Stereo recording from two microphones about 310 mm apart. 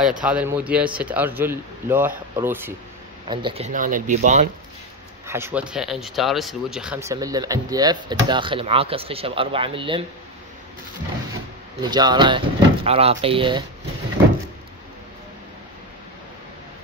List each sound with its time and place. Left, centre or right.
0.0 s a man's voice: centre; by 4.5 s right
5.2 s speech: centre
11.8 s speech: centre